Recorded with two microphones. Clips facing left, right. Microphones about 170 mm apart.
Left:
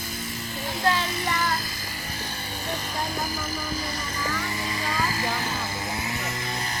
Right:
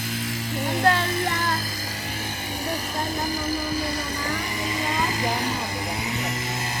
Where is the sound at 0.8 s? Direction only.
50° right (ahead or behind).